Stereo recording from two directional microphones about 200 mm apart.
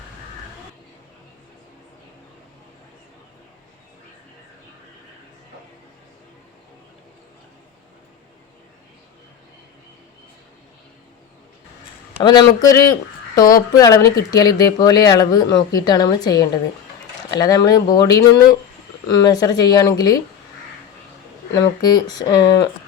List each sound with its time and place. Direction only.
12.2 s speech: 20° left (ahead or behind)
21.5 s speech: 20° left (ahead or behind)